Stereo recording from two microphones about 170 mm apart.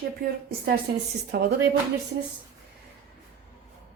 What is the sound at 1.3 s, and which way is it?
Speech, 75° right (ahead or behind).